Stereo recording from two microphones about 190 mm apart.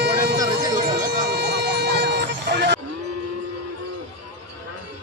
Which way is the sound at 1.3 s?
60° right (ahead or behind).